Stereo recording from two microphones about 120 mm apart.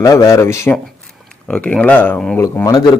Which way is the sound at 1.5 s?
10° left (ahead or behind).